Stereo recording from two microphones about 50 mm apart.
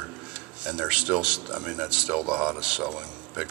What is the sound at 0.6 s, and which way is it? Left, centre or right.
Speech, right.